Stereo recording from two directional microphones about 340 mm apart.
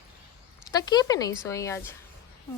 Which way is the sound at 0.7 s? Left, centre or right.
Centre.